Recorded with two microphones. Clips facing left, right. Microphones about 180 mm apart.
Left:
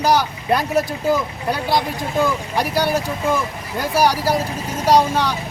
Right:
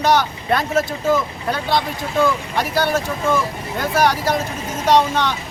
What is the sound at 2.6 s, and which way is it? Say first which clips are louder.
Speech: left 2 dB; 10° left (ahead or behind).